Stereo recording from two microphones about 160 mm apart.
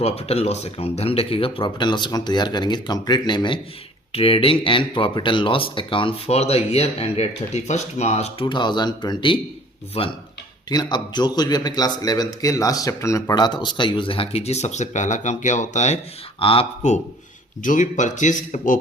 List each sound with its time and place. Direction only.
0.0 s speech: 40° left (ahead or behind)
8.4 s speech: 30° left (ahead or behind)
10.7 s speech: 25° left (ahead or behind); by 16.0 s 45° left (ahead or behind)
16.4 s speech: 35° left (ahead or behind)
17.6 s speech: 50° left (ahead or behind)